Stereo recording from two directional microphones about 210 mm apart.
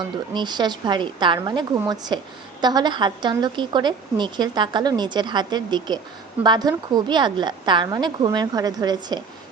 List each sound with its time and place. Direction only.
0.3 s a woman's voice: 20° right (ahead or behind)